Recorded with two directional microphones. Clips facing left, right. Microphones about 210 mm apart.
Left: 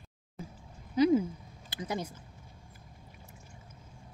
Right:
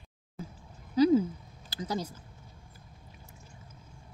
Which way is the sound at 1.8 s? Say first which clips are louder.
Right 2 dB; 25° left (ahead or behind).